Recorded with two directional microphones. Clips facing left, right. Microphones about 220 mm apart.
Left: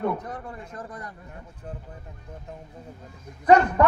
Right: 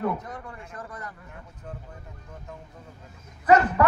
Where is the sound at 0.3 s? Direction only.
35° left (ahead or behind).